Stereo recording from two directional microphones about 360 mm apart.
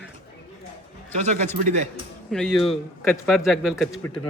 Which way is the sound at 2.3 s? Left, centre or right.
Centre.